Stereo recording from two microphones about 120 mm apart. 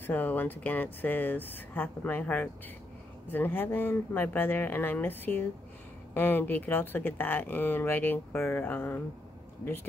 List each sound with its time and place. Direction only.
0.0 s speech: 15° left (ahead or behind)